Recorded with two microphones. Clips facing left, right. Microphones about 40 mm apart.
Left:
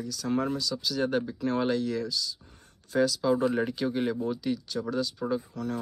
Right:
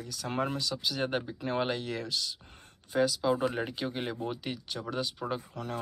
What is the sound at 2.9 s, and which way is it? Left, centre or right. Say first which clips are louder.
Speech: left 3 dB; centre.